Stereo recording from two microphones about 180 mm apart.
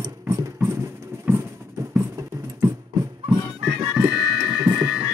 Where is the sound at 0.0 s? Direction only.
15° right (ahead or behind).